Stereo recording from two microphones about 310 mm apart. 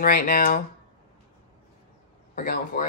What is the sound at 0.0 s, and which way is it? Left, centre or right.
Speech, left.